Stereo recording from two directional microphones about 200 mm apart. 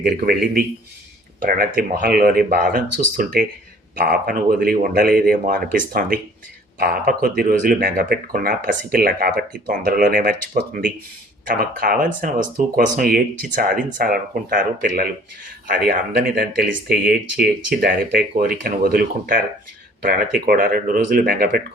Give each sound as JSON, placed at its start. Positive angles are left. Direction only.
{"t": 0.0, "sound": "speech", "side_deg": -45}